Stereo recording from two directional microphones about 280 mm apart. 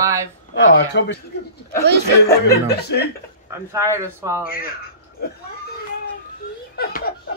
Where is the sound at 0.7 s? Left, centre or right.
Left.